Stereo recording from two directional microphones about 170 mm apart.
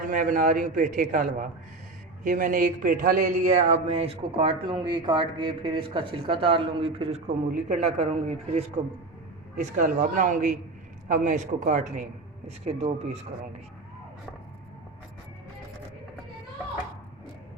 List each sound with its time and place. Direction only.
0.0 s a man's voice: 50° right (ahead or behind)